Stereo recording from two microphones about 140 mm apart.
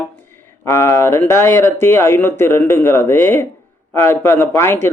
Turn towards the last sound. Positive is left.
turn(degrees=15)  # may be behind; listen again after turning